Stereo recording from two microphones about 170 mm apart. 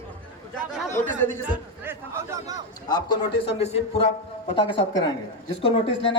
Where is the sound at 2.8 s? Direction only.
25° left (ahead or behind).